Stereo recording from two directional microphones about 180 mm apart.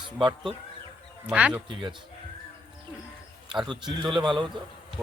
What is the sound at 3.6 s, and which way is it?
Speech, 25° right (ahead or behind).